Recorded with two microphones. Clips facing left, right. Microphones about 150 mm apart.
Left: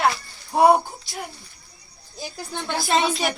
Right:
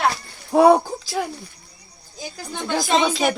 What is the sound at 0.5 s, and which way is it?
Speech, 90° right.